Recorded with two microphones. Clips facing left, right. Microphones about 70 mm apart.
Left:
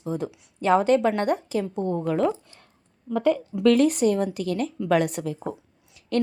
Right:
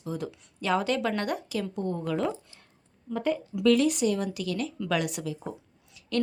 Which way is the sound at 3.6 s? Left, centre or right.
Left.